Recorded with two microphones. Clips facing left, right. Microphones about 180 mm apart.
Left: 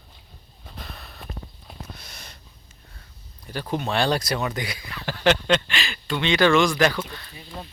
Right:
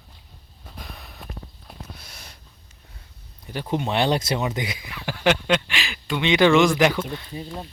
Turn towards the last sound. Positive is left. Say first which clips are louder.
# right 3 dB
turn(degrees=-15)  # may be behind; listen again after turning